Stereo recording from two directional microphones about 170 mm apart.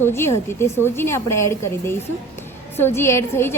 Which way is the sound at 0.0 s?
15° left (ahead or behind).